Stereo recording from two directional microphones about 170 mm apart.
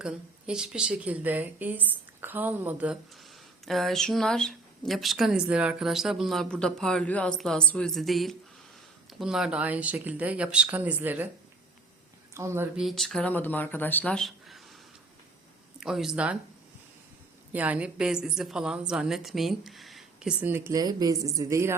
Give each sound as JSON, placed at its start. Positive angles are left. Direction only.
{"t": 0.0, "sound": "a woman's voice", "side_deg": -5}
{"t": 12.3, "sound": "a woman's voice", "side_deg": -15}
{"t": 12.7, "sound": "speech", "side_deg": 0}
{"t": 15.8, "sound": "speech", "side_deg": -5}
{"t": 17.5, "sound": "speech", "side_deg": -10}